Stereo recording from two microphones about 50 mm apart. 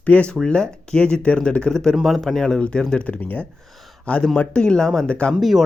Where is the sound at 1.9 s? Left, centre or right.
Centre.